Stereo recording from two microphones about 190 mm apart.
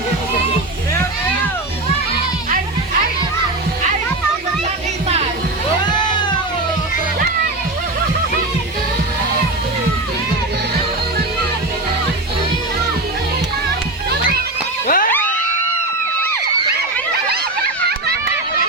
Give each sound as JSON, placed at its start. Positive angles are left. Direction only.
{"t": 5.9, "sound": "music", "side_deg": 25}
{"t": 14.1, "sound": "music", "side_deg": -55}
{"t": 14.8, "sound": "music", "side_deg": 50}